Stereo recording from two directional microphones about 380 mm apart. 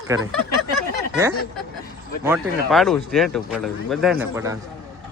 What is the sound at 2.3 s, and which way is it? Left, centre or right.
Speech, centre.